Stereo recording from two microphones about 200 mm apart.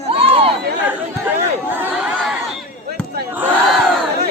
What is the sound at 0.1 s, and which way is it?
Chatter, 30° right (ahead or behind).